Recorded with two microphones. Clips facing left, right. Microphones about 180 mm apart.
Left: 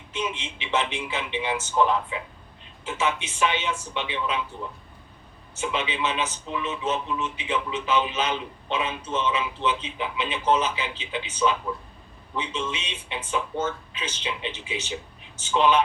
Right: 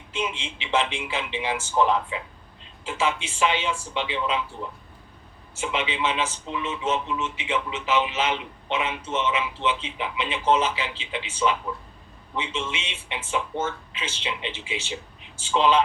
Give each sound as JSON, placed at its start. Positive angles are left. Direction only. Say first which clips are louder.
{"t": 0.1, "sound": "a man's voice", "louder": "right 1 dB", "side_deg": -25}
{"t": 5.8, "sound": "a man's voice", "louder": "right 1 dB", "side_deg": -25}